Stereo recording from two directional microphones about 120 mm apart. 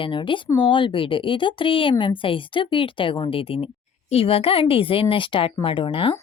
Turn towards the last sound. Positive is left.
turn(degrees=45)  # may be behind; listen again after turning